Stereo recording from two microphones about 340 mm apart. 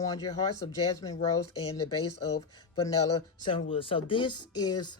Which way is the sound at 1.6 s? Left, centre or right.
Left.